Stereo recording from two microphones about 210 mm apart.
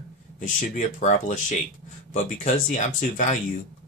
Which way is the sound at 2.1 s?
35° left (ahead or behind).